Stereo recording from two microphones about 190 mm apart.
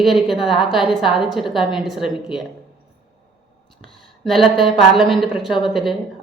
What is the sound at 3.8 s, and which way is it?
A woman's voice, centre (ahead or behind).